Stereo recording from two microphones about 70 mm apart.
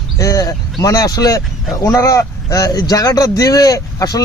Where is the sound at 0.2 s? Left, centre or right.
Left.